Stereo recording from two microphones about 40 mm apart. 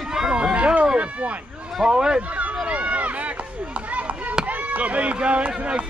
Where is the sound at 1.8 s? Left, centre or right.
Right.